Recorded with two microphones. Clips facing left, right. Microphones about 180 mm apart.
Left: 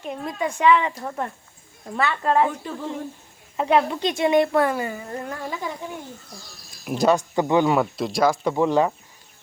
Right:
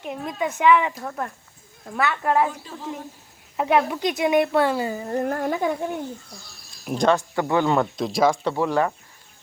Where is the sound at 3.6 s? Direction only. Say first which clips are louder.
Left 1 dB; 10° right (ahead or behind); by 5.2 s 30° right (ahead or behind).